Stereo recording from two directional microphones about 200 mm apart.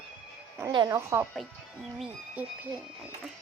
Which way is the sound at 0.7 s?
20° right (ahead or behind).